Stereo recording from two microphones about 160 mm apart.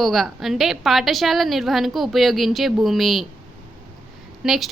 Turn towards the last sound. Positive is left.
turn(degrees=0)  # may be behind; listen again after turning